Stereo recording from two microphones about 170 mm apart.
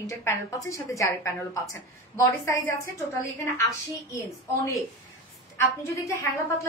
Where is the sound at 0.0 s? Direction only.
15° left (ahead or behind).